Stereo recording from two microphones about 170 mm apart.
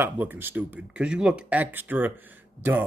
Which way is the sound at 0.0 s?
10° right (ahead or behind).